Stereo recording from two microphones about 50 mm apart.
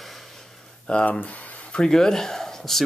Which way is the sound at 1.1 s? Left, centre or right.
Left.